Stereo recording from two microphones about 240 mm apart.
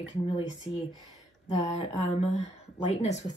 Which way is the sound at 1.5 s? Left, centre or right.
Left.